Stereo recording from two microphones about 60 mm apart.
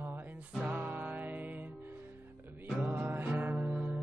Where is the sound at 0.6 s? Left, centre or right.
Right.